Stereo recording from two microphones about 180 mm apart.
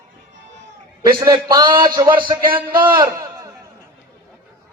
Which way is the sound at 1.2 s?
20° right (ahead or behind).